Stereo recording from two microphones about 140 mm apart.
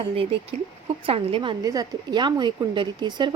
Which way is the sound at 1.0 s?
40° right (ahead or behind).